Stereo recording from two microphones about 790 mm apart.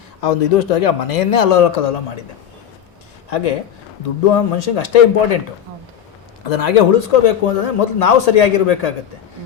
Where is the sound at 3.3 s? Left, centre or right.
Left.